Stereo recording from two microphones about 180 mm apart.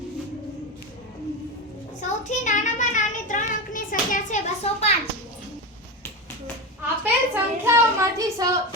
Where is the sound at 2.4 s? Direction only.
45° left (ahead or behind).